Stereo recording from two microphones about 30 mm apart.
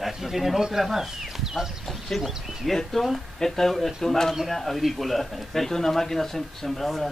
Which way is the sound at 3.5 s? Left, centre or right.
Centre.